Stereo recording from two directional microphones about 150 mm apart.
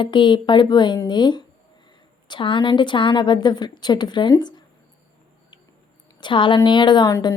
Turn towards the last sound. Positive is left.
turn(degrees=25)  # may be behind; listen again after turning